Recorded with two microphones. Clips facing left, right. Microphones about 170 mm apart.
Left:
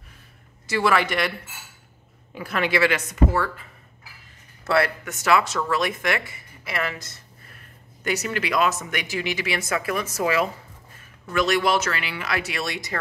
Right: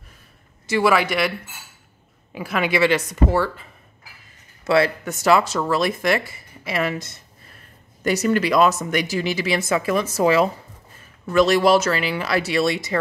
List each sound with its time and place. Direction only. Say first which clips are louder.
0.8 s speech: right 3 dB; 10° right (ahead or behind)
2.3 s speech: right 2 dB; 10° right (ahead or behind)
2.7 s speech: right 4 dB; 25° right (ahead or behind)
4.6 s speech: right 4 dB; 20° right (ahead or behind)
5.0 s speech: right 3 dB; 35° right (ahead or behind)
6.6 s speech: right 5 dB; 20° right (ahead or behind)
8.0 s speech: right 7 dB; 40° right (ahead or behind)